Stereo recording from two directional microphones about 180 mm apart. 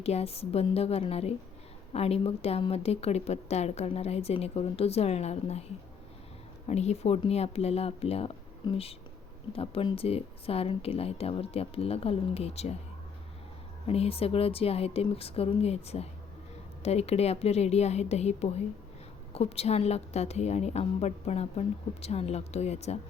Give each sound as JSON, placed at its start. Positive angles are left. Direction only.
{"t": 0.0, "sound": "a woman's voice", "side_deg": 35}
{"t": 6.7, "sound": "a woman's voice", "side_deg": 35}
{"t": 13.8, "sound": "a woman's voice", "side_deg": 35}